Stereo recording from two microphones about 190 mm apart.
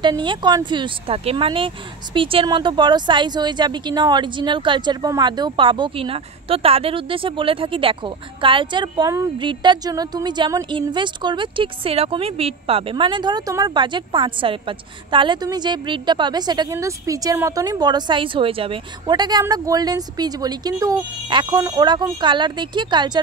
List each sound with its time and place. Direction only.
0.0 s a woman's voice: 25° right (ahead or behind)